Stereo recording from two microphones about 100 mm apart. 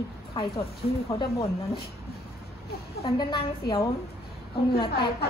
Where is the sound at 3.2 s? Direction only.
50° left (ahead or behind).